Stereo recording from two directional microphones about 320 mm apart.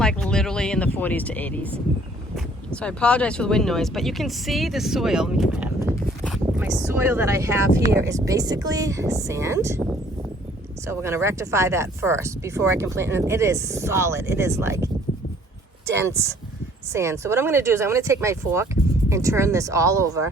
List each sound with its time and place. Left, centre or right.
0.0 s speech: centre
2.8 s speech: centre
10.8 s speech: centre
15.9 s speech: centre